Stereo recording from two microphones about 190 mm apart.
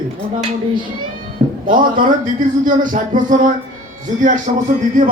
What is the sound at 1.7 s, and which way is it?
Speech, 45° right (ahead or behind).